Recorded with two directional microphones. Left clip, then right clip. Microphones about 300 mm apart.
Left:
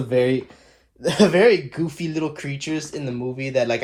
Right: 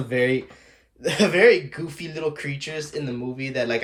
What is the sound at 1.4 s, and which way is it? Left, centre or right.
Speech, centre.